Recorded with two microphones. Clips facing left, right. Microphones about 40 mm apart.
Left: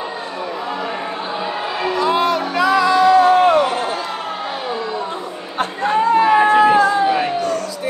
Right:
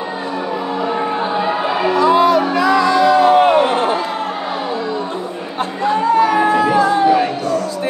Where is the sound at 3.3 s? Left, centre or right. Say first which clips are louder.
Right 2 dB; right.